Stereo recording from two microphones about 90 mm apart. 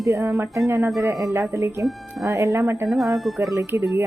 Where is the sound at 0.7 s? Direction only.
25° right (ahead or behind).